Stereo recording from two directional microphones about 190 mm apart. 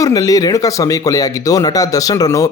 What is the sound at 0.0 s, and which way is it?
Speech, 20° left (ahead or behind).